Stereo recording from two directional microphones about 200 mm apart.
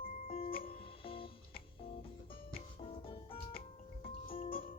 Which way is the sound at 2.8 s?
30° left (ahead or behind).